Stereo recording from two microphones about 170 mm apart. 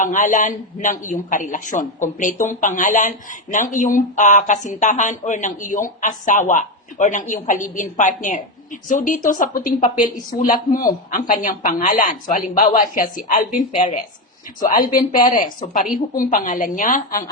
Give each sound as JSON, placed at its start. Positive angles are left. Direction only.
{"t": 0.0, "sound": "speech", "side_deg": 50}